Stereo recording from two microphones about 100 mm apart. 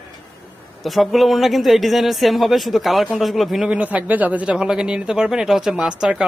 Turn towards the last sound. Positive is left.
turn(degrees=-10)  # may be behind; listen again after turning